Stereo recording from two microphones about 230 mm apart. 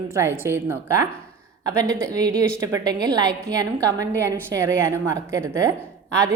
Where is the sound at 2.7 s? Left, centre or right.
Centre.